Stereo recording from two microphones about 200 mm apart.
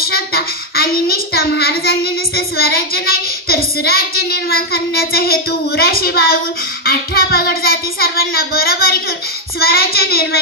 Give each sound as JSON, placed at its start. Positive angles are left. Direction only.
{"t": 0.0, "sound": "child singing", "side_deg": 50}